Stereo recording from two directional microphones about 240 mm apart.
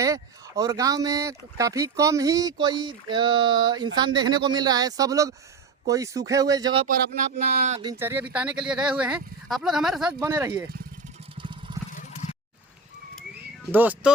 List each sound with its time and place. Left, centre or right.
0.0 s speech: centre
7.3 s speech: right
7.8 s speech: centre
11.3 s vehicle: right
11.9 s a sound: left
13.7 s speech: centre